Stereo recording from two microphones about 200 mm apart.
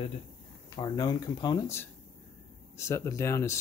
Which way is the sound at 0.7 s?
20° left (ahead or behind).